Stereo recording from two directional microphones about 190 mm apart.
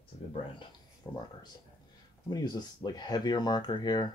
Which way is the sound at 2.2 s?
20° left (ahead or behind).